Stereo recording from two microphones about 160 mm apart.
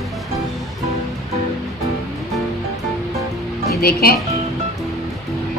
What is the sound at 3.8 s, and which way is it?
Speech, 70° left (ahead or behind).